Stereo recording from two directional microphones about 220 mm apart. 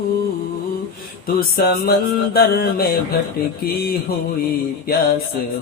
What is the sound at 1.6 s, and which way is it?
Music, 45° left (ahead or behind).